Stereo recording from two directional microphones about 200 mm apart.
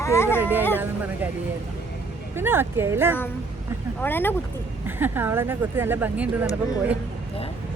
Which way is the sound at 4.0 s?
10° left (ahead or behind).